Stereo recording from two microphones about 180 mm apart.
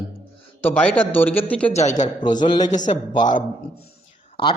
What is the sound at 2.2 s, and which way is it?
Speech, 25° left (ahead or behind).